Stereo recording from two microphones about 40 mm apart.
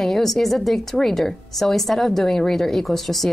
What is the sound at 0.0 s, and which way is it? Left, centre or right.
A woman's voice, centre.